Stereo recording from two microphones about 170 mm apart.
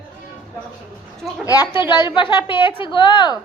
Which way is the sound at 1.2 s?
Centre (ahead or behind).